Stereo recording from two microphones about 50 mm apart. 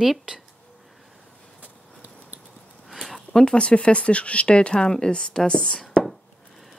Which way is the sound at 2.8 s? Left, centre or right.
Centre.